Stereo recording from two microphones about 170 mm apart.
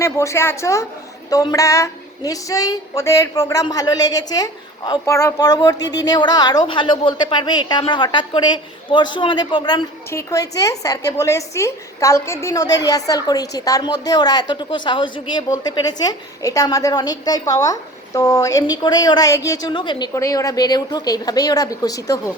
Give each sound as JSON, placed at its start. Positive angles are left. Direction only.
{"t": 0.0, "sound": "a woman's voice", "side_deg": 15}